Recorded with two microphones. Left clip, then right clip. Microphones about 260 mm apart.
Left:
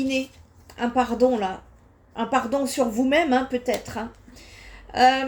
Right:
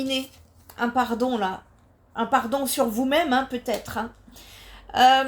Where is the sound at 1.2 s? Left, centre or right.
Right.